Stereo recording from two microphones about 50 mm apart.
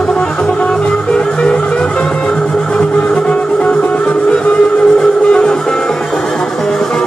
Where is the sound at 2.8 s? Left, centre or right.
Left.